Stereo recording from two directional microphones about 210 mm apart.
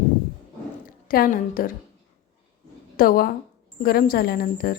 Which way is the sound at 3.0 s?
45° left (ahead or behind).